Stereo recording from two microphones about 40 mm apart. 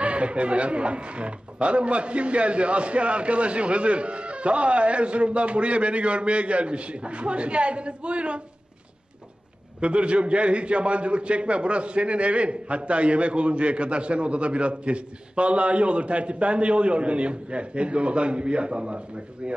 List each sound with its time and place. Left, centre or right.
0.0 s a man's voice: right
9.8 s a man's voice: right